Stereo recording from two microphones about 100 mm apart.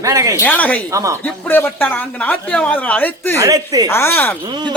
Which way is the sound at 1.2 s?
20° left (ahead or behind).